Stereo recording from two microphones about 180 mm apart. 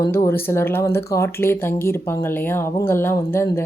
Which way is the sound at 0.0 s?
15° left (ahead or behind).